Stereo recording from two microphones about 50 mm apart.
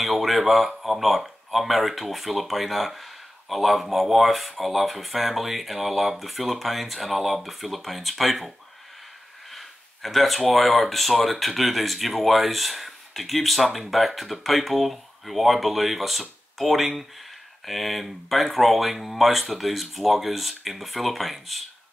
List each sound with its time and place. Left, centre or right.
0.0 s speech: centre